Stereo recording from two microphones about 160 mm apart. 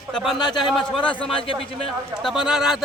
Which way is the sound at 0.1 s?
Centre (ahead or behind).